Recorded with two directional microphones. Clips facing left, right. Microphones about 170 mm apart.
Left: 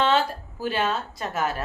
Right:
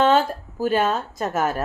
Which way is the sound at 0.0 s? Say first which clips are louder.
Right 4 dB; 45° right (ahead or behind).